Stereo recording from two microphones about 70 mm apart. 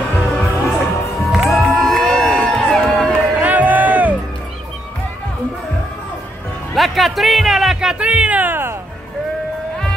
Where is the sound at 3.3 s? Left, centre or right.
Right.